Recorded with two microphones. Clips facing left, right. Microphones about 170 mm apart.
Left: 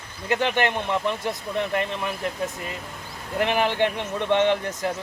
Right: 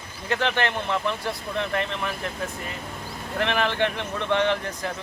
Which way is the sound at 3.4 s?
15° left (ahead or behind).